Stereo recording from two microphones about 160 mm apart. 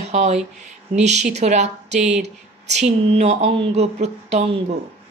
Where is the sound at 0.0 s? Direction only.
45° right (ahead or behind).